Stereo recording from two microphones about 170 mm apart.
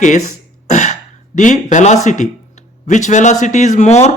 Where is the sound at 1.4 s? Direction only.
45° left (ahead or behind).